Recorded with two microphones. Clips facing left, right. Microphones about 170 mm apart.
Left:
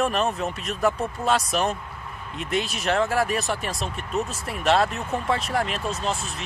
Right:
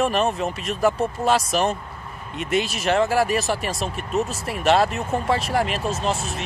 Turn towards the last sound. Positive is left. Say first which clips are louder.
# right 3 dB
turn(degrees=-5)  # may be behind; listen again after turning